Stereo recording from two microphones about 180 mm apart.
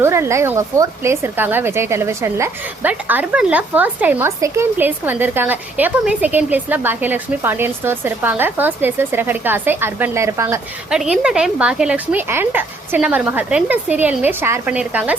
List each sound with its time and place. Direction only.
0.0 s speech: 15° right (ahead or behind)
10.9 s speech: 5° right (ahead or behind)